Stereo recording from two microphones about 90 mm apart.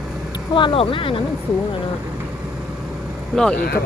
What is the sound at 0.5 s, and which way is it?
Speech, 75° left (ahead or behind).